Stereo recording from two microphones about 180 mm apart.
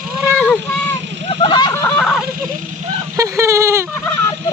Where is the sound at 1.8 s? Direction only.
5° left (ahead or behind).